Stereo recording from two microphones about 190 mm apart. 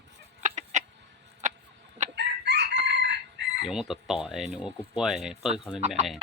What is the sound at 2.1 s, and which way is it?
Chicken, 65° right (ahead or behind).